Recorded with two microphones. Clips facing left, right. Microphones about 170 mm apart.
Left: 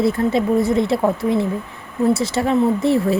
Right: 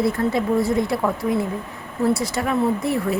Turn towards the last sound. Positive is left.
turn(degrees=25)  # may be behind; listen again after turning